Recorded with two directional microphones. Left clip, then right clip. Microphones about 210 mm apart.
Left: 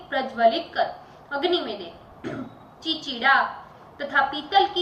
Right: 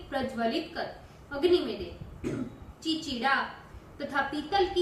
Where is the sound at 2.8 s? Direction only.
25° right (ahead or behind).